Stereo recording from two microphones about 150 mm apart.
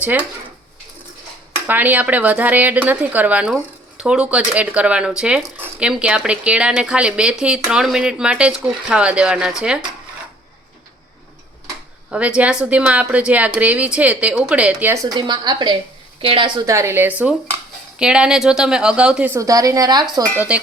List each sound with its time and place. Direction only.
0.0 s speech: 10° right (ahead or behind)
1.6 s speech: 10° right (ahead or behind)
12.1 s speech: 10° right (ahead or behind)
14.9 s a woman's voice: 25° right (ahead or behind)
16.6 s speech: 20° right (ahead or behind)
19.3 s speech: 20° right (ahead or behind)
20.3 s speech: 10° right (ahead or behind)